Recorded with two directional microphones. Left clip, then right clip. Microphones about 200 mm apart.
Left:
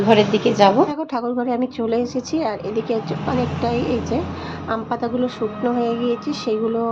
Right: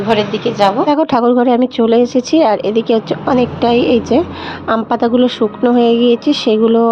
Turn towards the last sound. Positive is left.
turn(degrees=-45)  # may be behind; listen again after turning